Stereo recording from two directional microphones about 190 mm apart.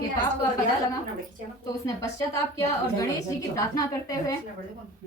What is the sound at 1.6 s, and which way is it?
A woman's voice, 15° left (ahead or behind).